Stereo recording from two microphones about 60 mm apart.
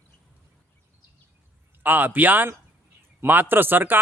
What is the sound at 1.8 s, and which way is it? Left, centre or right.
A man's voice, right.